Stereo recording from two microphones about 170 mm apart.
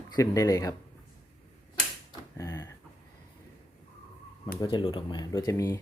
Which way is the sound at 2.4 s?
15° left (ahead or behind).